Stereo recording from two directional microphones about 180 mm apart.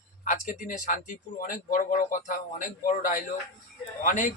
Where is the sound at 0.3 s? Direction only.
45° left (ahead or behind).